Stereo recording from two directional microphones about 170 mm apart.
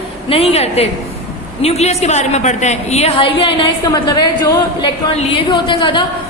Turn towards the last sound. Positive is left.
turn(degrees=25)  # may be behind; listen again after turning